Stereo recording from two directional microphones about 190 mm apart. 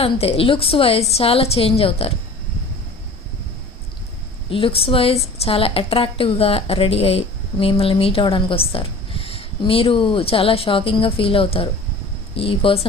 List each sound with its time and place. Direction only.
0.0 s a woman's voice: 30° left (ahead or behind)
4.4 s a woman's voice: 30° left (ahead or behind)